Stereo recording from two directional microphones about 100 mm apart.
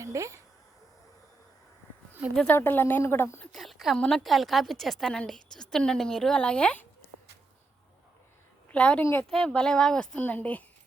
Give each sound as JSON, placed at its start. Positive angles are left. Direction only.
{"t": 0.0, "sound": "speech", "side_deg": -30}
{"t": 2.5, "sound": "a woman's voice", "side_deg": 20}
{"t": 3.5, "sound": "a woman's voice", "side_deg": 0}
{"t": 8.7, "sound": "speech", "side_deg": 10}